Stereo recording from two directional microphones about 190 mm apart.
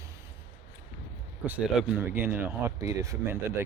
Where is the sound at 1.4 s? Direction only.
5° right (ahead or behind).